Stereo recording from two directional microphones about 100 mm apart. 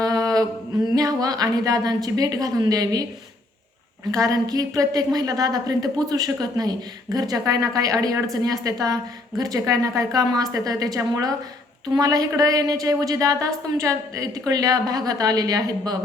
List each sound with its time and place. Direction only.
0.0 s a sound: 35° right (ahead or behind)
0.9 s speech: 35° right (ahead or behind)
4.1 s speech: 35° right (ahead or behind)